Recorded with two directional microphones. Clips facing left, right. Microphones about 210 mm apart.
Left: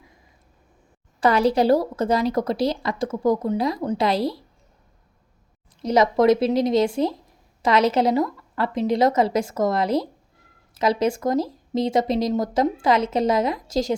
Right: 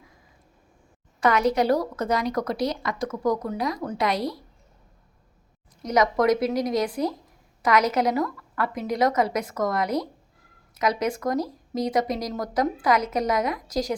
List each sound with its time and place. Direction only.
1.2 s speech: 30° left (ahead or behind)
5.8 s speech: 30° left (ahead or behind)